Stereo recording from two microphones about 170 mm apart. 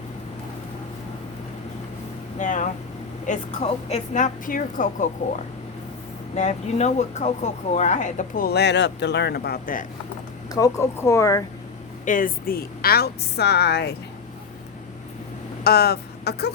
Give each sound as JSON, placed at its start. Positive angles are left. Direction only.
{"t": 2.4, "sound": "speech", "side_deg": 50}
{"t": 6.3, "sound": "speech", "side_deg": 40}
{"t": 10.5, "sound": "speech", "side_deg": 20}
{"t": 12.0, "sound": "a woman's voice", "side_deg": 50}
{"t": 15.6, "sound": "speech", "side_deg": 70}